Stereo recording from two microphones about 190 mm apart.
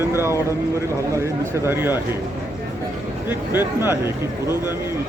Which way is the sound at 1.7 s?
10° right (ahead or behind).